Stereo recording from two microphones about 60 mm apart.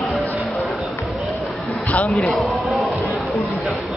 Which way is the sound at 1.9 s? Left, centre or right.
Left.